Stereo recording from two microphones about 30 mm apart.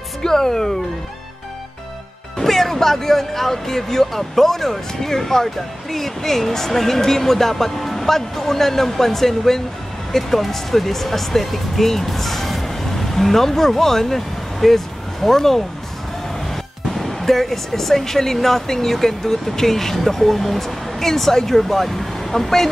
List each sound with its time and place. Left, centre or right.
0.2 s speech: centre
2.3 s speech: centre
16.9 s speech: centre